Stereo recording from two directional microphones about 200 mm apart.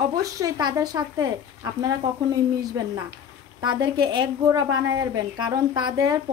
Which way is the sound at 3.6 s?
20° right (ahead or behind).